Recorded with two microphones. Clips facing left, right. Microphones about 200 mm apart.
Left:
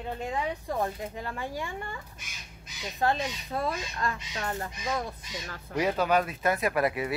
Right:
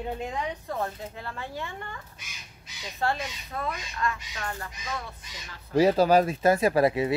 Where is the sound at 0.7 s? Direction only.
15° left (ahead or behind).